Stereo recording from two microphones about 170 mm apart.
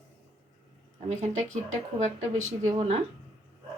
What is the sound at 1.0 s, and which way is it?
Speech, 40° right (ahead or behind).